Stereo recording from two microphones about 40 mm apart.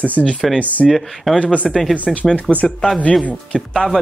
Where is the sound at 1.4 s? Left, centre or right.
Left.